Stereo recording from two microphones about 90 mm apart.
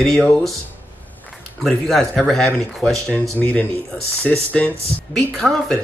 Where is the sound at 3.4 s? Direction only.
15° left (ahead or behind).